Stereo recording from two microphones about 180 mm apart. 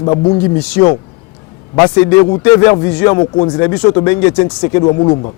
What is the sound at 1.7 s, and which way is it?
A man's voice, 20° left (ahead or behind).